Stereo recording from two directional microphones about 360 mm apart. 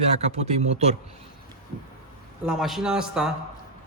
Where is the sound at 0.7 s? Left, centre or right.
Centre.